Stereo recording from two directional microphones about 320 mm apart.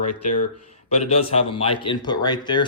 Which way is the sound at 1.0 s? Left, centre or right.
Centre.